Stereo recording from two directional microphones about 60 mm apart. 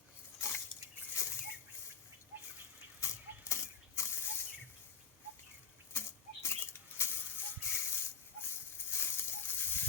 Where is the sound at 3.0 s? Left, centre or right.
Left.